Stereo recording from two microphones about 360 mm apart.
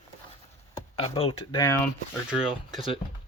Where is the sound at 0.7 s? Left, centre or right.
Centre.